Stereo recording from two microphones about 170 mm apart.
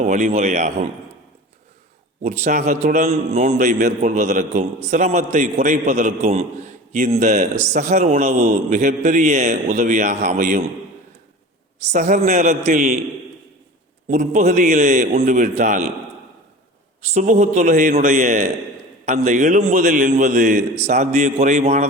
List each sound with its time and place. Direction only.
0.0 s a man's voice: 45° right (ahead or behind)
2.2 s a man's voice: 45° right (ahead or behind)
11.9 s a man's voice: 45° right (ahead or behind)
14.1 s a man's voice: 45° right (ahead or behind)
17.0 s a man's voice: 45° right (ahead or behind)